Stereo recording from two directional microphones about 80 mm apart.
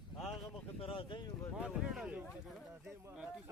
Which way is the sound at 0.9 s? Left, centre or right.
Left.